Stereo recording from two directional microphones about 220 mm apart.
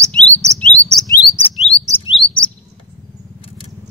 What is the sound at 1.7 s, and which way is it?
Bird, 25° left (ahead or behind).